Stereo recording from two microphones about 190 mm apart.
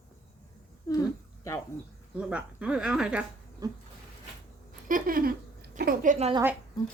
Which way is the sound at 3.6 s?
20° right (ahead or behind).